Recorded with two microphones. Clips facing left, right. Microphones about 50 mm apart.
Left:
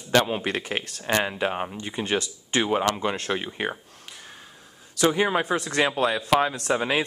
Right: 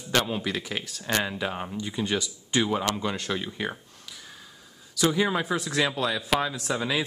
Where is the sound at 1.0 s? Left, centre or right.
Left.